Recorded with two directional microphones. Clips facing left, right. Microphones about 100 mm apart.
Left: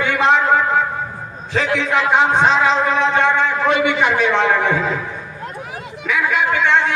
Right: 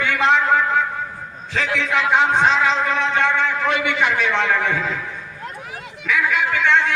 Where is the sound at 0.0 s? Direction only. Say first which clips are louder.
Left 2 dB; 20° left (ahead or behind).